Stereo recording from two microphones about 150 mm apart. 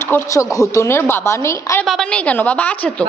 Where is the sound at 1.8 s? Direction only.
Centre (ahead or behind).